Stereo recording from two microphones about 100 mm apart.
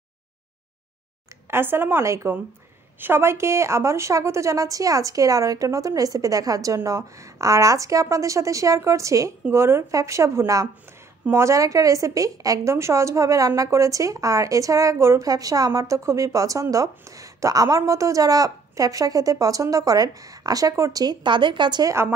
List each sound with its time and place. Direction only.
1.5 s a woman's voice: 20° right (ahead or behind); by 21.9 s 45° right (ahead or behind)